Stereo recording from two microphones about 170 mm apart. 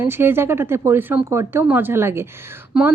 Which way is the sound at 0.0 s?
15° right (ahead or behind).